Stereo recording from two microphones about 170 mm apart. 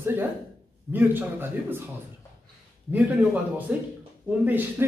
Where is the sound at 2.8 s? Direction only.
10° right (ahead or behind).